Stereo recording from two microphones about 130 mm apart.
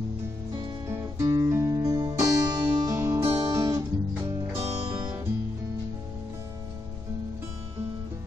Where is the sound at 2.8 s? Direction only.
20° right (ahead or behind).